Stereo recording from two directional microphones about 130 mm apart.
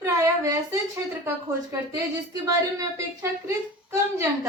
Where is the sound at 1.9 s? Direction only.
30° right (ahead or behind).